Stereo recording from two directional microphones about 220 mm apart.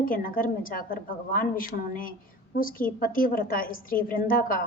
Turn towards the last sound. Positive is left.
turn(degrees=40)  # may be behind; listen again after turning